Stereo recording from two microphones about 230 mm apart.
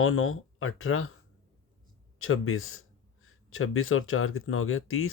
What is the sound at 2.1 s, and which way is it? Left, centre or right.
Speech, left.